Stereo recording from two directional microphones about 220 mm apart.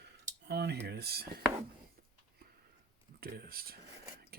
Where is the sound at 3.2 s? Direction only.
45° right (ahead or behind).